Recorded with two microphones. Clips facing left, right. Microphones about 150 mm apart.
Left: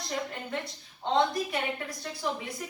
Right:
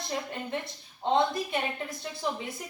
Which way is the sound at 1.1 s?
25° right (ahead or behind).